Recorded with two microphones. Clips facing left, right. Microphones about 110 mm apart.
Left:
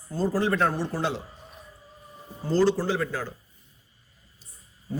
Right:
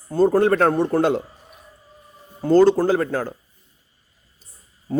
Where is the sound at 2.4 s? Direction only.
55° right (ahead or behind).